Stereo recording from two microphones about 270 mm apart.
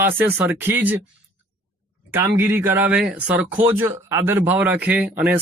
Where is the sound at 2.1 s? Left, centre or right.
Centre.